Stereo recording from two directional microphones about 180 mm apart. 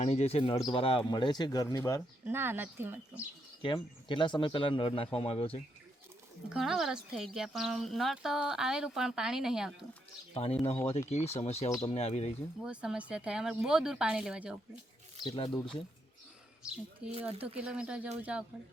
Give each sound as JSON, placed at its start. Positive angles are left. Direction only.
{"t": 0.0, "sound": "speech", "side_deg": 35}
{"t": 2.2, "sound": "speech", "side_deg": -10}
{"t": 3.6, "sound": "speech", "side_deg": 25}
{"t": 6.5, "sound": "speech", "side_deg": 0}
{"t": 10.3, "sound": "speech", "side_deg": 35}
{"t": 12.6, "sound": "speech", "side_deg": -5}
{"t": 15.2, "sound": "speech", "side_deg": 30}
{"t": 17.1, "sound": "speech", "side_deg": -30}
{"t": 17.4, "sound": "speech", "side_deg": -5}